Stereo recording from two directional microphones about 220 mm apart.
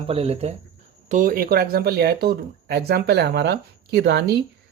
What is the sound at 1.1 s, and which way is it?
Speech, 40° right (ahead or behind).